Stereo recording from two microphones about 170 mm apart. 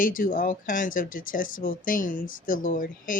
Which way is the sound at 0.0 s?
55° left (ahead or behind).